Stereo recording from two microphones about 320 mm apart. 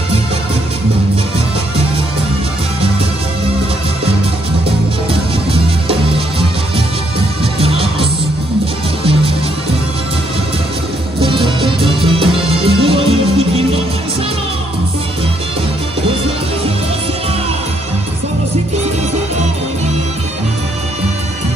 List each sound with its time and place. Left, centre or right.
5.5 s music: centre
7.6 s music: centre
11.1 s music: centre